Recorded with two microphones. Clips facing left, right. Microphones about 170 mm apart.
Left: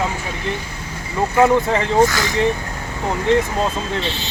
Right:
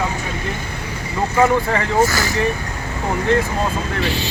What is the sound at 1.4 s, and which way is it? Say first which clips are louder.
Speech: left 2 dB; 20° left (ahead or behind).